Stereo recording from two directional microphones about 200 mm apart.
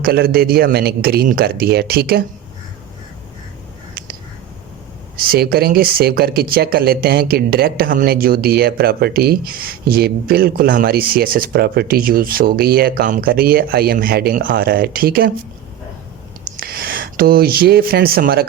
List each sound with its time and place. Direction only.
0.0 s speech: 50° right (ahead or behind)
5.1 s speech: 50° right (ahead or behind)
16.6 s speech: 50° right (ahead or behind)